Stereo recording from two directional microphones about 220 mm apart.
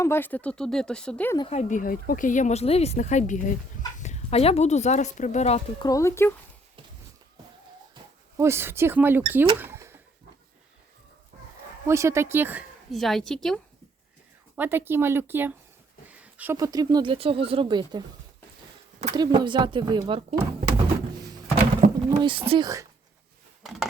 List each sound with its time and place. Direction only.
0.0 s speech: 10° left (ahead or behind)
1.4 s speech: 30° left (ahead or behind)
5.9 s speech: 15° left (ahead or behind)
8.4 s a woman's voice: 10° right (ahead or behind)
9.6 s rodents: 10° right (ahead or behind)
11.9 s a woman's voice: 10° right (ahead or behind)
14.5 s a woman's voice: 10° right (ahead or behind)
19.1 s speech: 20° right (ahead or behind)
21.8 s pigeon: 35° right (ahead or behind)
22.2 s speech: 25° right (ahead or behind)